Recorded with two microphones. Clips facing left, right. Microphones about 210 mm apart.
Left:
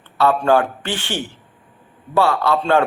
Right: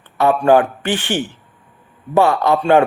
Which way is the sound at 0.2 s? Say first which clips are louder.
Right 3 dB; 15° right (ahead or behind).